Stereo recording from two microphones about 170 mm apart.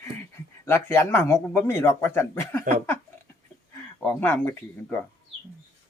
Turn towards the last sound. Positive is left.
turn(degrees=10)  # may be behind; listen again after turning